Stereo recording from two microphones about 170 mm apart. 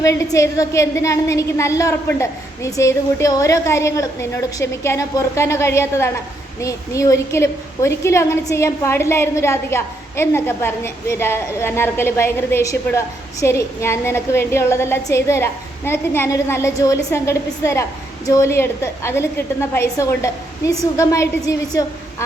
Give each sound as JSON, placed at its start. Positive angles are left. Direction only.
{"t": 0.0, "sound": "a woman's voice", "side_deg": 20}